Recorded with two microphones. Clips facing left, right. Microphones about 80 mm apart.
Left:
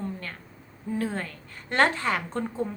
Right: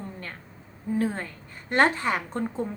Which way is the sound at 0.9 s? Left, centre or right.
Right.